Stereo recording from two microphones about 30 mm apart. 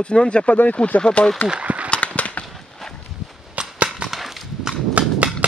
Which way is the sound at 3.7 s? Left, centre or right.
Right.